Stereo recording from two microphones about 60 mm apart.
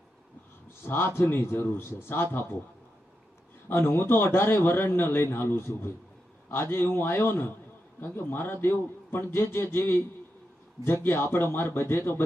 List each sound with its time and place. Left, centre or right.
0.8 s a man's voice: left
3.7 s a man's voice: left